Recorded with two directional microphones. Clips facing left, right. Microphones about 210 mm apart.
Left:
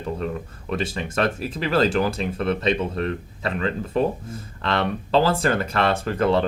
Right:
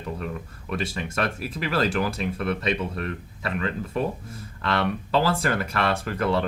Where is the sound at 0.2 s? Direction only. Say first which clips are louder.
Left 5 dB; 30° left (ahead or behind).